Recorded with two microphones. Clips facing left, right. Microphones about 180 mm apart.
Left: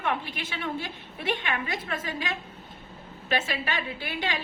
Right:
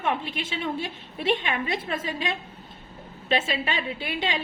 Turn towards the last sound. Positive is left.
turn(degrees=-20)  # may be behind; listen again after turning